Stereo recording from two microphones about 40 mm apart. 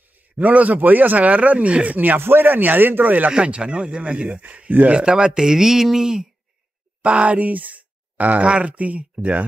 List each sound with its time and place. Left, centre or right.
0.4 s speech: right
0.7 s speech: right
2.1 s speech: right
3.3 s speech: right
4.4 s speech: right
5.0 s speech: right
7.0 s speech: right
7.3 s speech: right